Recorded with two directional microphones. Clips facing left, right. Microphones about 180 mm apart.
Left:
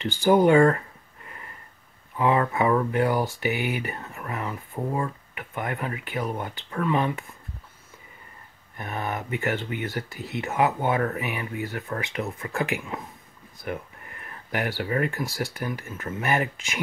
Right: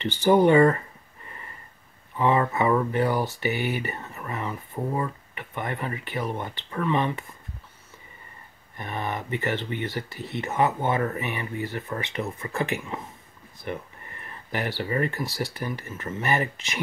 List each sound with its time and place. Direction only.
0.2 s a sound: centre (ahead or behind)
2.1 s speech: centre (ahead or behind)
8.7 s speech: 5° left (ahead or behind)